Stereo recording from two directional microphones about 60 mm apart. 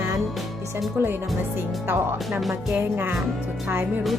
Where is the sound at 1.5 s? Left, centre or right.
Right.